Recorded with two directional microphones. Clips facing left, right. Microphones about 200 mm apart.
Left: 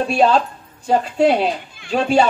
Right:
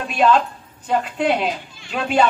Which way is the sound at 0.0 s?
35° left (ahead or behind).